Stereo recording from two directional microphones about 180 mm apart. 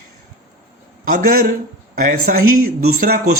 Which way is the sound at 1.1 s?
45° right (ahead or behind).